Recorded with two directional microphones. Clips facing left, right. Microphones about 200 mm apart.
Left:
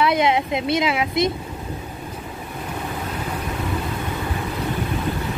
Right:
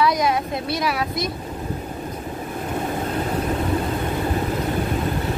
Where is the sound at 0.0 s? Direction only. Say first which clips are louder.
Left 1 dB; 25° left (ahead or behind).